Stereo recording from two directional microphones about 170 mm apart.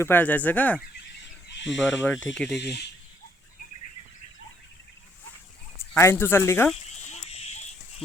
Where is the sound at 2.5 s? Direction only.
80° left.